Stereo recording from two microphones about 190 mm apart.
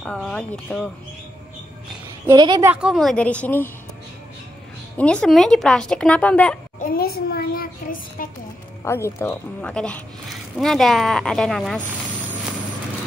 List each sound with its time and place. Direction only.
0.0 s speech: 5° left (ahead or behind)
2.2 s a woman's voice: 20° right (ahead or behind)
2.7 s speech: 5° right (ahead or behind)
4.9 s speech: 5° left (ahead or behind)
6.8 s child singing: 50° left (ahead or behind)
8.8 s speech: 15° left (ahead or behind)